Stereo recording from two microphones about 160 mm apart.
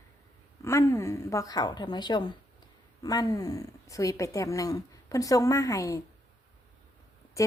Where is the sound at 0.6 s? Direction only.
15° left (ahead or behind).